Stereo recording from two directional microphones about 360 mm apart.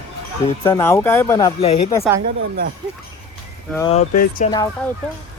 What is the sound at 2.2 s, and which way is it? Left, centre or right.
Speech, right.